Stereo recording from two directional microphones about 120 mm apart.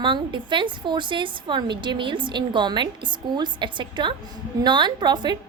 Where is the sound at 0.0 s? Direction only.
40° right (ahead or behind).